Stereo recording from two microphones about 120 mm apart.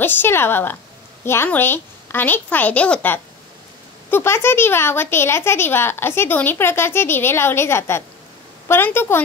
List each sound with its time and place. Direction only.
0.0 s a woman's voice: 15° left (ahead or behind)